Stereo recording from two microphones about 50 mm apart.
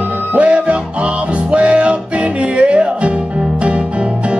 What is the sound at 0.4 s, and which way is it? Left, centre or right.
Music, right.